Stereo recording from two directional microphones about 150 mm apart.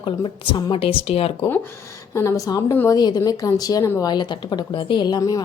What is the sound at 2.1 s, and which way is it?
A woman's voice, 20° left (ahead or behind).